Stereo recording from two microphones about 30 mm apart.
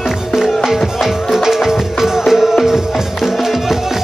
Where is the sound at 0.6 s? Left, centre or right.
Centre.